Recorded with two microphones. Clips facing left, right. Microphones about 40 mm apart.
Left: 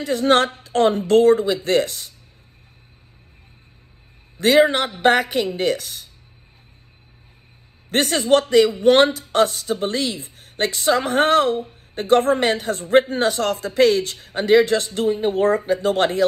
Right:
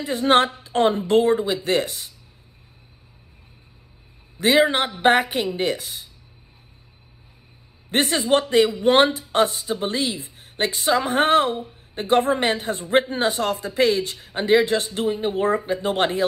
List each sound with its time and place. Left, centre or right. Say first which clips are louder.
0.0 s speech: left 1 dB; right
4.4 s speech: left 2 dB; right
7.9 s a woman's voice: left 2 dB; right